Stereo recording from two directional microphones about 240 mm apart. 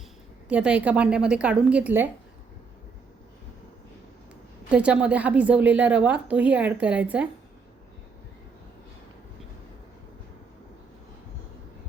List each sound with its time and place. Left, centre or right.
0.4 s a woman's voice: centre
4.7 s a woman's voice: centre